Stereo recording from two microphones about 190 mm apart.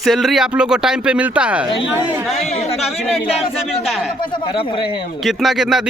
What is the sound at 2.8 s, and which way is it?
Speech, centre (ahead or behind).